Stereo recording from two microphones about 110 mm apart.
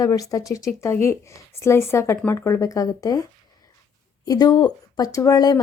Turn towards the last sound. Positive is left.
turn(degrees=35)  # may be behind; listen again after turning